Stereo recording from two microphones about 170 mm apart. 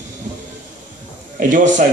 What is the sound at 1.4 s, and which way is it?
Speech, 50° right (ahead or behind).